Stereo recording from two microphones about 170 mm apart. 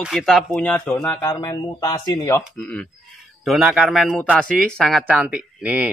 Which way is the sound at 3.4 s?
Centre (ahead or behind).